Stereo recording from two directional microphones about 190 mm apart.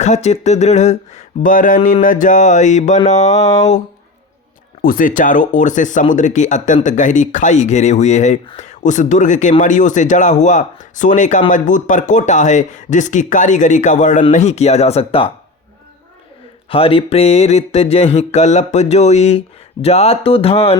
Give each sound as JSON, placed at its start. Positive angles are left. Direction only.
{"t": 0.0, "sound": "speech", "side_deg": 35}
{"t": 4.8, "sound": "speech", "side_deg": 45}
{"t": 16.6, "sound": "speech", "side_deg": 30}